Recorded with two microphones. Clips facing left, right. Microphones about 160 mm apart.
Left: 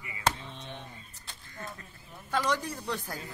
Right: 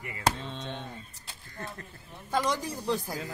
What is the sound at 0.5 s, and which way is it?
Speech, 80° right.